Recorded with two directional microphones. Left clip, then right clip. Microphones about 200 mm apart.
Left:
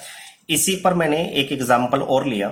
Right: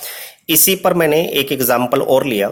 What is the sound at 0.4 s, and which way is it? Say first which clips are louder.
Speech: right 5 dB; 50° right (ahead or behind).